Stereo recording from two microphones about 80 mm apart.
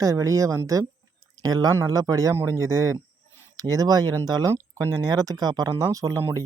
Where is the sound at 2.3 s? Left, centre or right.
Right.